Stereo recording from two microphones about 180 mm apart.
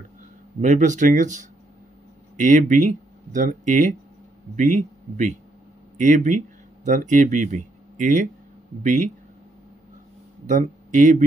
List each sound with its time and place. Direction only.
0.6 s a man's voice: 45° right (ahead or behind)
10.4 s speech: 45° right (ahead or behind)